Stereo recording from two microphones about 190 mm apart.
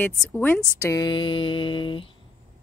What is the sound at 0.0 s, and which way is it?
Speech, 10° left (ahead or behind).